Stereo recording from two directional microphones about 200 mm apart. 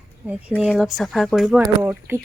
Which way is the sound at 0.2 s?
10° right (ahead or behind).